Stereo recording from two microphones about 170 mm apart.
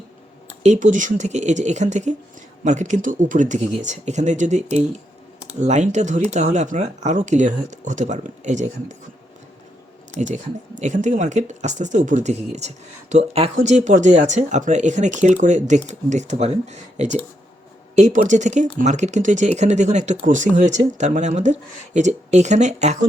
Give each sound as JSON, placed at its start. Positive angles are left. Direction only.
{"t": 0.6, "sound": "speech", "side_deg": -45}
{"t": 10.2, "sound": "speech", "side_deg": -45}